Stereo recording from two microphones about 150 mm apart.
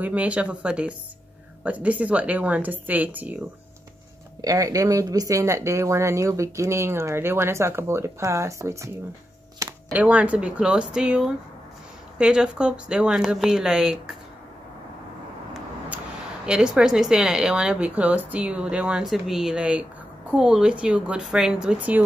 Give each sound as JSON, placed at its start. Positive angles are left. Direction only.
{"t": 0.0, "sound": "speech", "side_deg": -10}
{"t": 4.4, "sound": "speech", "side_deg": -25}
{"t": 9.6, "sound": "a sound", "side_deg": -20}
{"t": 9.9, "sound": "speech", "side_deg": -10}
{"t": 16.4, "sound": "speech", "side_deg": -5}